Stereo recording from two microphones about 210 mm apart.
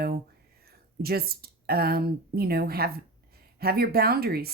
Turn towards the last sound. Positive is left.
turn(degrees=-45)  # may be behind; listen again after turning